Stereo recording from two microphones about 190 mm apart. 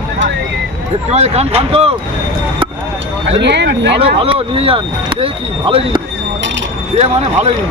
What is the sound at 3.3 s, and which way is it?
Speech, 65° right (ahead or behind).